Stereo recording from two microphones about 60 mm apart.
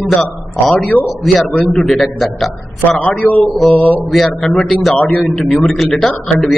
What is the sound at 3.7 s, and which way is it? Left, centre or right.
Speech, left.